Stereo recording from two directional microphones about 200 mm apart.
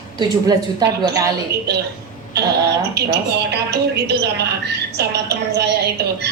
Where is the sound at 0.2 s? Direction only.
20° right (ahead or behind).